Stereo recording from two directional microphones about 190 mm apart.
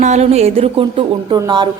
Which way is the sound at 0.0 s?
35° right (ahead or behind).